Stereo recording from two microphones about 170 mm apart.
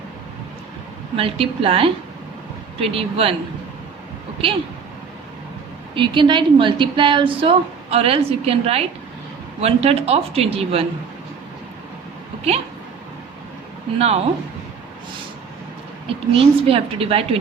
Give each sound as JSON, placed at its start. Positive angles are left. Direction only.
{"t": 1.1, "sound": "a woman's voice", "side_deg": -35}
{"t": 5.9, "sound": "a woman's voice", "side_deg": -30}
{"t": 14.0, "sound": "a woman's voice", "side_deg": -35}
{"t": 16.0, "sound": "a woman's voice", "side_deg": -35}